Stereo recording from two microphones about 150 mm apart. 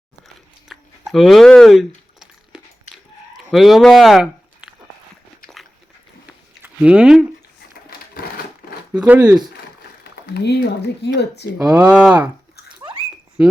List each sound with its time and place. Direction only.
0.7 s speech: centre (ahead or behind)
2.9 s chicken: centre (ahead or behind)
6.6 s speech: 5° right (ahead or behind)
8.9 s speech: 10° right (ahead or behind)
10.0 s speech: 90° left
11.5 s speech: 5° right (ahead or behind)
12.6 s a sound: 30° right (ahead or behind)